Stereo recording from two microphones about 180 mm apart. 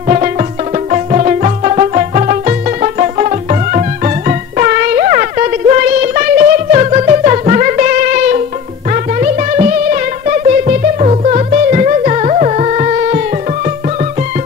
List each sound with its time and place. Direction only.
0.1 s music: 40° right (ahead or behind)